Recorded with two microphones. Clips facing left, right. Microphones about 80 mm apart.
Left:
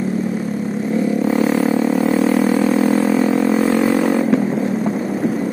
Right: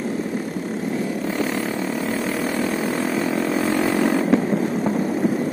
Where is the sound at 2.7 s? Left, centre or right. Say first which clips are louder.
Left 8 dB; left.